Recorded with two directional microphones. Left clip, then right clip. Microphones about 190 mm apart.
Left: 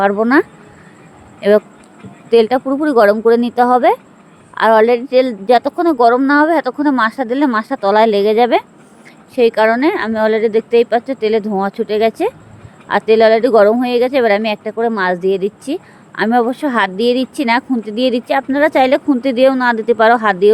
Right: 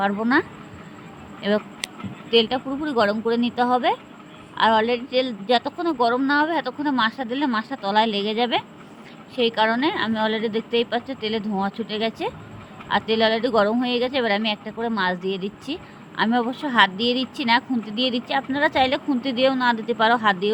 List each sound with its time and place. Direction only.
0.0 s speech: 50° left (ahead or behind)